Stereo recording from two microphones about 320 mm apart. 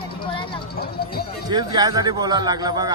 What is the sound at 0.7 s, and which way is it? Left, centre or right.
Speech, left.